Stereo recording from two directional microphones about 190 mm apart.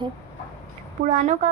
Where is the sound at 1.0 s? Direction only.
40° right (ahead or behind).